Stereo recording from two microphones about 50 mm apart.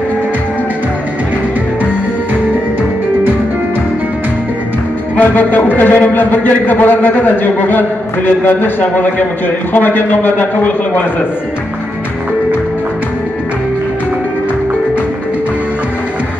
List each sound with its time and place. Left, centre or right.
5.1 s a man's voice: left